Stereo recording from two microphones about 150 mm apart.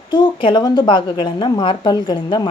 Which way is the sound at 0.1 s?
30° left (ahead or behind).